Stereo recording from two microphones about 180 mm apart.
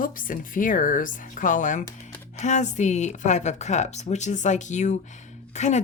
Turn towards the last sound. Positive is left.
turn(degrees=40)  # may be behind; listen again after turning